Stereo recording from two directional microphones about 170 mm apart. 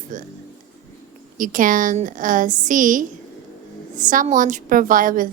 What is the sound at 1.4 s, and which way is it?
A woman's voice, 50° right (ahead or behind).